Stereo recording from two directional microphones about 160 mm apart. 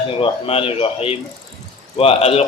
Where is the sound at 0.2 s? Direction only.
35° left (ahead or behind).